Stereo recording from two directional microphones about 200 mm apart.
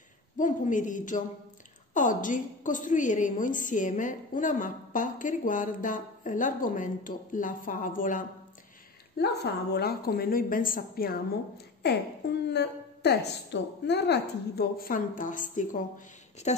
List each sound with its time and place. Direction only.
0.4 s a woman's voice: 40° left (ahead or behind)